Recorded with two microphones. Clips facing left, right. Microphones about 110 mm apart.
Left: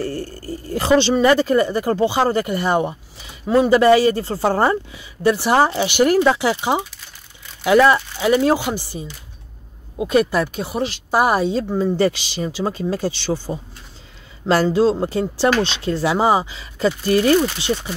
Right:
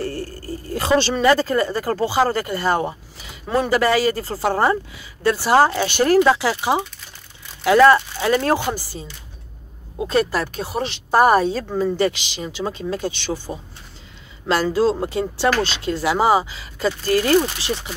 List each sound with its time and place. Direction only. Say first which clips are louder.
0.0 s a sound: left 1 dB; 30° left (ahead or behind)
1.0 s speech: left 2 dB; 20° left (ahead or behind)
7.8 s speech: right 2 dB; 15° left (ahead or behind)
11.5 s speech: left 2 dB; 20° left (ahead or behind)
12.0 s speech: left 2 dB; 35° left (ahead or behind)
14.4 s speech: left 3 dB; 25° left (ahead or behind)